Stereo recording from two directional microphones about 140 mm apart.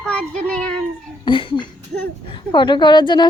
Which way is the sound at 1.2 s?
35° left (ahead or behind).